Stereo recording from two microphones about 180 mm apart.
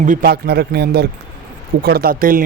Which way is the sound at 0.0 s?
50° right (ahead or behind).